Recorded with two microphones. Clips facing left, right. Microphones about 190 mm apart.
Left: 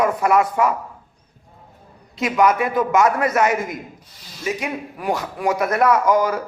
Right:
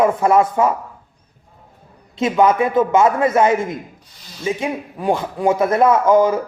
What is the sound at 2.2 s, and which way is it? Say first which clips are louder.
A man's voice: right 3 dB; 25° right (ahead or behind).